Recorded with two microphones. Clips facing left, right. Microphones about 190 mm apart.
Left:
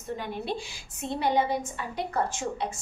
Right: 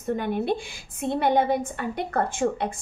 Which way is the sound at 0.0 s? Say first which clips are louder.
Right 8 dB; 55° right (ahead or behind).